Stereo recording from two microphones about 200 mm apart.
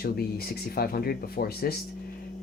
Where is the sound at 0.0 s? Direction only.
50° left (ahead or behind).